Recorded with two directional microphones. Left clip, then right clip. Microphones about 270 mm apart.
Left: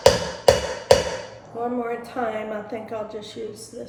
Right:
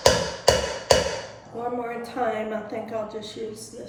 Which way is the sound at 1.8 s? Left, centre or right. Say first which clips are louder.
Left 1 dB; centre.